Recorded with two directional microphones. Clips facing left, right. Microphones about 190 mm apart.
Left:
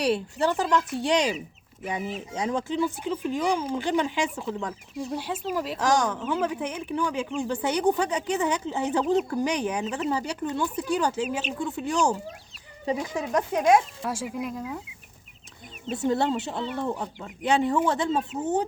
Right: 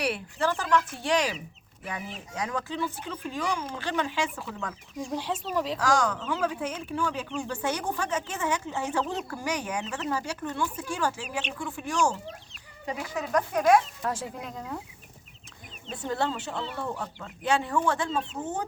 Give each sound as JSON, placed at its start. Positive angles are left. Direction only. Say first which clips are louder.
{"t": 0.0, "sound": "speech", "louder": "left 4 dB", "side_deg": 25}
{"t": 5.1, "sound": "speech", "louder": "even", "side_deg": 10}
{"t": 5.8, "sound": "speech", "louder": "left 4 dB", "side_deg": 20}
{"t": 14.1, "sound": "speech", "louder": "left 5 dB", "side_deg": 10}
{"t": 16.0, "sound": "speech", "louder": "left 5 dB", "side_deg": 20}
{"t": 18.1, "sound": "speech", "louder": "left 4 dB", "side_deg": 10}